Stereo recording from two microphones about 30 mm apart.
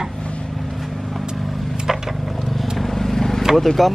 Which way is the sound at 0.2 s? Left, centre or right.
Left.